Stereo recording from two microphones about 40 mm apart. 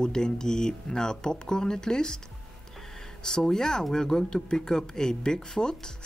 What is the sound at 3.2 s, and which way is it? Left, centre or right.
Speech, centre.